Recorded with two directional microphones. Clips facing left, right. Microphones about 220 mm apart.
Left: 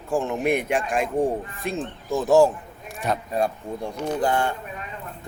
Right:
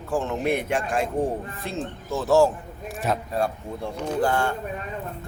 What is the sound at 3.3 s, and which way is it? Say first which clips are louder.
Speech: left 2 dB; 15° left (ahead or behind).